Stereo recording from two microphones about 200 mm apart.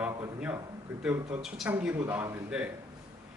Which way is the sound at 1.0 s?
10° right (ahead or behind).